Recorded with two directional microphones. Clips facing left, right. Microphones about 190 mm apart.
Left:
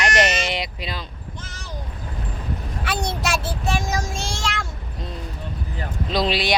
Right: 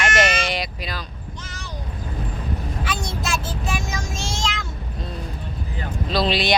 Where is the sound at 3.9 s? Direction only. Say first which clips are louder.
Left 4 dB; 35° left (ahead or behind).